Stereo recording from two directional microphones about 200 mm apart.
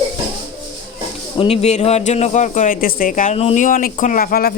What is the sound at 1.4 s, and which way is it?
Speech, 30° left (ahead or behind).